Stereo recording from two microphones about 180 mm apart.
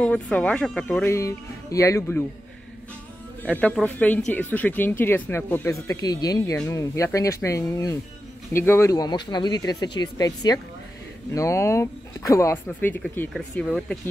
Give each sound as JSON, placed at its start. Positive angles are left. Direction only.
{"t": 0.0, "sound": "speech", "side_deg": 5}
{"t": 3.4, "sound": "speech", "side_deg": 5}